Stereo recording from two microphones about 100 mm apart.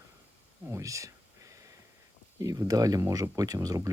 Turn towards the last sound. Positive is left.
turn(degrees=-40)  # may be behind; listen again after turning